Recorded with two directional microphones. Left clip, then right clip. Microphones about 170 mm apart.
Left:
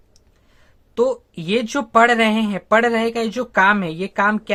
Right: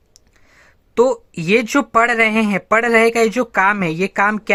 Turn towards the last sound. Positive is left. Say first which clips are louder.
# right 3 dB
turn(degrees=-25)  # may be behind; listen again after turning